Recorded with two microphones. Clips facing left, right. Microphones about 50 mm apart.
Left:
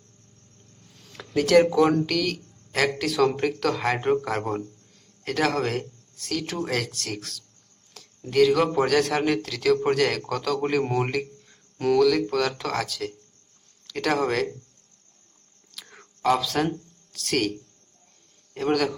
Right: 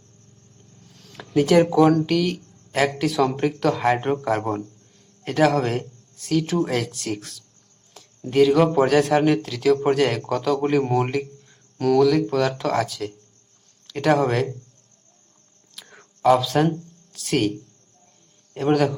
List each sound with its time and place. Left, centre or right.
0.9 s a sound: centre
1.4 s a man's voice: centre
10.8 s a man's voice: centre
15.7 s a sound: centre
16.2 s speech: centre
18.5 s speech: centre